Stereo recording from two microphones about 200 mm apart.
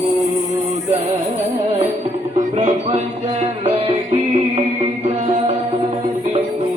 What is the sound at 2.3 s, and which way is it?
Music, 35° right (ahead or behind).